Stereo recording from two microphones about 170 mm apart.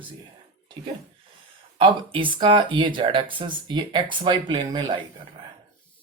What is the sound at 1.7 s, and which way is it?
Speech, 30° right (ahead or behind).